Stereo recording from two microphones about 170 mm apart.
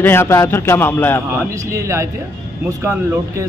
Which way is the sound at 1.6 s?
15° right (ahead or behind).